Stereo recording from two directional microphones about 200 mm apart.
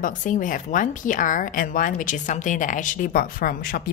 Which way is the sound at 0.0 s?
40° left (ahead or behind).